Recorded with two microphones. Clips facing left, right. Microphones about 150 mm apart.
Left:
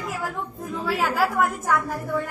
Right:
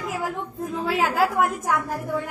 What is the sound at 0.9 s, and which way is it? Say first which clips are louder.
Speech: right 1 dB; 20° right (ahead or behind).